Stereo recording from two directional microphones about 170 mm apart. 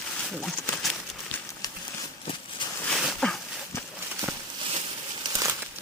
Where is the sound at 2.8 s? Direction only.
Centre (ahead or behind).